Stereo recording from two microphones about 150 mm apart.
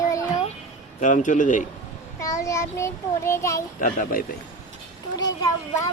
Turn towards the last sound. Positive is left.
turn(degrees=25)  # may be behind; listen again after turning